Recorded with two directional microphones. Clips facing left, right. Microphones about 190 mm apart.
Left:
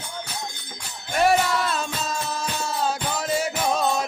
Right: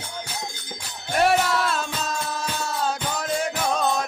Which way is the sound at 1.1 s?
Centre (ahead or behind).